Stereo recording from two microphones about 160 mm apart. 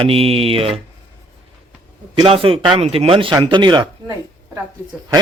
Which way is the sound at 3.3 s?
30° right (ahead or behind).